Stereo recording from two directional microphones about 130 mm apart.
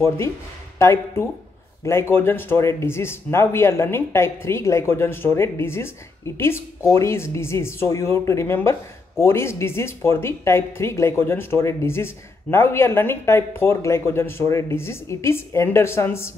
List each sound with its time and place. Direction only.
0.7 s speech: 20° left (ahead or behind)